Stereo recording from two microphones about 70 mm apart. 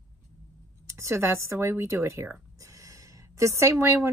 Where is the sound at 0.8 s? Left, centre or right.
Right.